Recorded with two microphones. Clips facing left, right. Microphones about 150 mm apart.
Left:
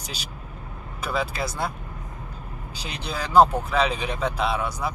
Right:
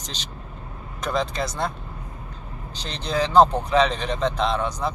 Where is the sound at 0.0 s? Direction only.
10° left (ahead or behind).